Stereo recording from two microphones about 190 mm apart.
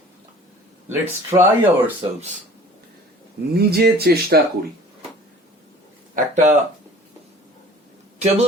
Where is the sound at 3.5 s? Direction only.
55° right (ahead or behind).